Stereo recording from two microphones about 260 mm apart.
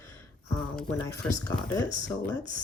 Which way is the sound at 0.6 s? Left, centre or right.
Centre.